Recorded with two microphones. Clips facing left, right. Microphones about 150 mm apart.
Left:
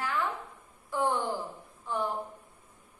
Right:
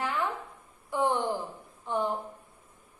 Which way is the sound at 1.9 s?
20° right (ahead or behind).